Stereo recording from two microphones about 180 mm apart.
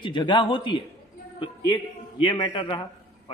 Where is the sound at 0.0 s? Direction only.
25° left (ahead or behind).